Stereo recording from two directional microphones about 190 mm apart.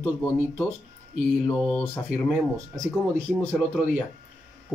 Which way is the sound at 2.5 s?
15° right (ahead or behind).